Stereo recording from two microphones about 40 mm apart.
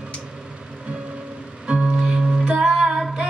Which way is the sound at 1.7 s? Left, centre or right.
Right.